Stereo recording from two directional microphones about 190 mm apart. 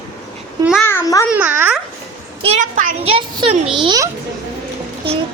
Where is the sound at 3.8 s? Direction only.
20° right (ahead or behind).